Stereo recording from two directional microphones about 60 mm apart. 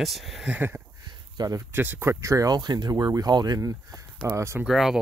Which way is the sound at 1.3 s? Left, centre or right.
Right.